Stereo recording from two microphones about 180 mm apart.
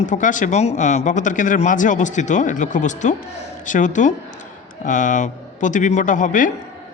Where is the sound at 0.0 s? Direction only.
45° left (ahead or behind).